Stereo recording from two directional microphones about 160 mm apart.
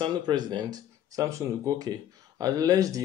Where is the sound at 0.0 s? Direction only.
30° right (ahead or behind).